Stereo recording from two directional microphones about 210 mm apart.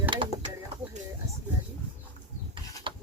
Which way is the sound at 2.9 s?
25° right (ahead or behind).